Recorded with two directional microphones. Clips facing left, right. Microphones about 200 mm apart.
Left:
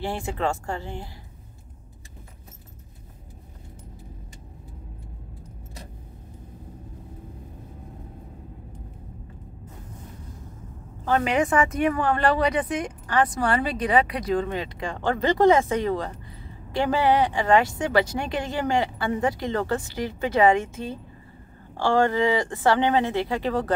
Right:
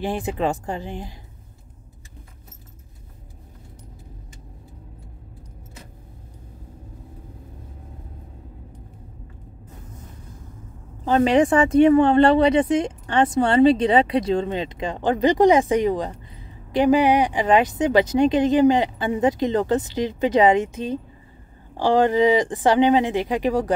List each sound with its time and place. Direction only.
0.0 s speech: 15° right (ahead or behind)
11.1 s speech: 25° right (ahead or behind)